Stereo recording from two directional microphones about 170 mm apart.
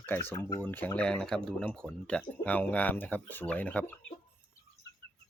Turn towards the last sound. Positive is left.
turn(degrees=10)  # may be behind; listen again after turning